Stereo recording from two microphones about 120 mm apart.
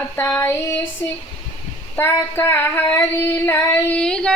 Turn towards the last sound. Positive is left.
turn(degrees=5)  # may be behind; listen again after turning